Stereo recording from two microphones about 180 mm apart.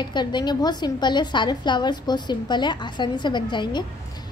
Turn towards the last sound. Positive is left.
turn(degrees=25)  # may be behind; listen again after turning